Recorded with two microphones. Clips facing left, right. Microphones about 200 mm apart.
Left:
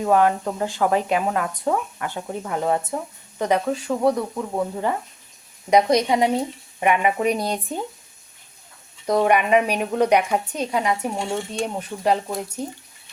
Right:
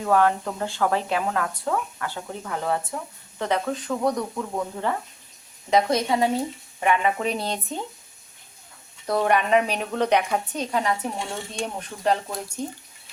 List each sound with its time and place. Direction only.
0.0 s speech: 15° left (ahead or behind)
9.0 s speech: 10° left (ahead or behind)